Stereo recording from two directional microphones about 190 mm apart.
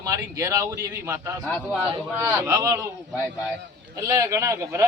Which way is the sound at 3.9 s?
15° right (ahead or behind).